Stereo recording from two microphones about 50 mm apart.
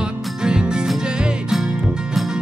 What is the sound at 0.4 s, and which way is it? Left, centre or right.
Music, centre.